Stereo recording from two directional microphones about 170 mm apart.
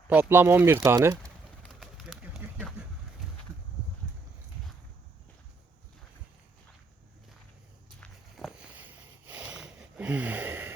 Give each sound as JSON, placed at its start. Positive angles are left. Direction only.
{"t": 0.1, "sound": "speech", "side_deg": -15}
{"t": 1.6, "sound": "bird", "side_deg": 0}
{"t": 8.0, "sound": "a sound", "side_deg": 0}